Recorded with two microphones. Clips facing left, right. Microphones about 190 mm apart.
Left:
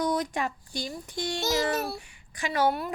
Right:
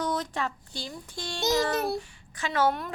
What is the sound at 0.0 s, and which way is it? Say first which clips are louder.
Speech: left 2 dB; 10° left (ahead or behind).